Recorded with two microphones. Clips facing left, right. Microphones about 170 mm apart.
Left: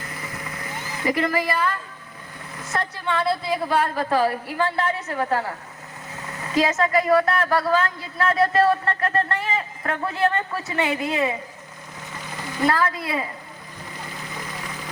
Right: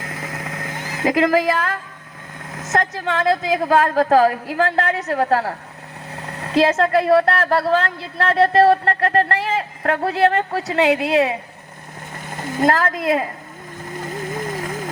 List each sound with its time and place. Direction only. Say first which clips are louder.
0.0 s vehicle: right 5 dB; 90° right
0.9 s a woman's voice: right 6 dB; 90° right
6.1 s a sound: right 5 dB; 65° right (ahead or behind)
7.5 s a man's voice: right 3 dB; 30° right (ahead or behind)
7.9 s a man's voice: right 2 dB; 70° right (ahead or behind)
10.7 s a man's voice: right 8 dB; 70° right (ahead or behind)
12.1 s a sound: right 6 dB; 50° right (ahead or behind)
13.9 s vehicle: right 10 dB; 50° right (ahead or behind)